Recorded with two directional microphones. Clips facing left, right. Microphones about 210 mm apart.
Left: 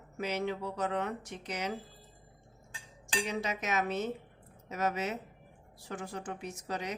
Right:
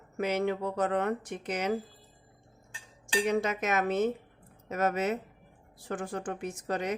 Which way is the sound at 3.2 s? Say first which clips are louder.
Right 7 dB; 50° right (ahead or behind).